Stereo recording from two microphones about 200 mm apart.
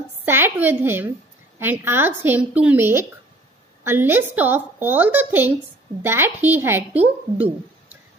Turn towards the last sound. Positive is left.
turn(degrees=-10)  # may be behind; listen again after turning